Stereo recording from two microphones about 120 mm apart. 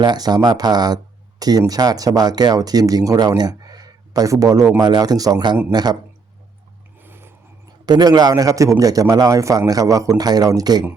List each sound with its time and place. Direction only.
0.0 s speech: 35° right (ahead or behind)
7.0 s vehicle: 20° right (ahead or behind)
7.9 s speech: 35° right (ahead or behind)